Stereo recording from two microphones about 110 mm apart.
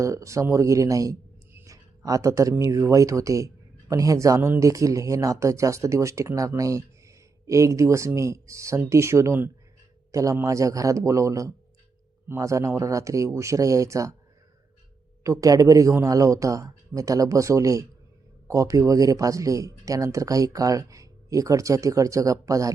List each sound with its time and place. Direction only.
0.0 s speech: 30° right (ahead or behind)
15.2 s speech: 30° right (ahead or behind)